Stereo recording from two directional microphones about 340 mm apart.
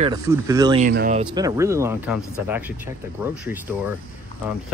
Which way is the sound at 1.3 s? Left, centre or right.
Centre.